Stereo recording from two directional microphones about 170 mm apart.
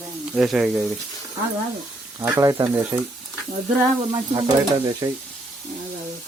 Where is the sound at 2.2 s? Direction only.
15° right (ahead or behind).